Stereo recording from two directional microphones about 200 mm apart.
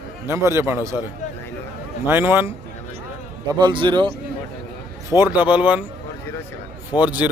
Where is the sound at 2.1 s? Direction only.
10° right (ahead or behind).